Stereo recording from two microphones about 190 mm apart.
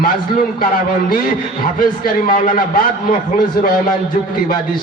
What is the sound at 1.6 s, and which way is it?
A man's voice, 50° left (ahead or behind).